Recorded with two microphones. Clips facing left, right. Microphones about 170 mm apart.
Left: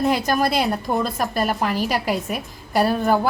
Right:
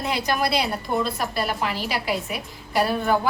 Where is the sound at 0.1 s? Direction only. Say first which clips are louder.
Left 4 dB; 45° left (ahead or behind).